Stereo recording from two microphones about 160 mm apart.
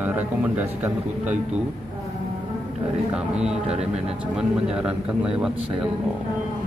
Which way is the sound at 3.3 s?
5° right (ahead or behind).